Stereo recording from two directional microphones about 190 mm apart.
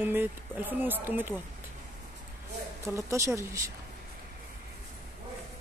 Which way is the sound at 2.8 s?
15° right (ahead or behind).